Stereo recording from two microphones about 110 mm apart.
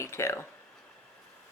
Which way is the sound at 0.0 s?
25° left (ahead or behind).